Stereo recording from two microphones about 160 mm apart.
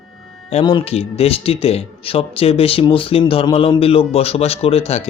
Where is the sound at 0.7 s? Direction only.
35° left (ahead or behind).